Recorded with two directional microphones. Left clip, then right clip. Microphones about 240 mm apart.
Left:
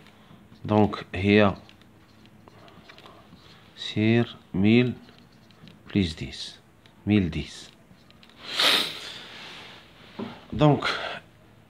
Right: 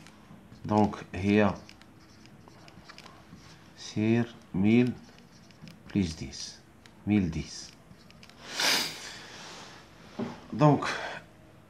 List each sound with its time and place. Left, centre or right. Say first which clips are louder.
0.7 s speech: left 4 dB; left
3.7 s speech: left 5 dB; left
5.9 s speech: left 5 dB; left
8.5 s snort: left 6 dB; left
10.5 s a sound: left 3 dB; left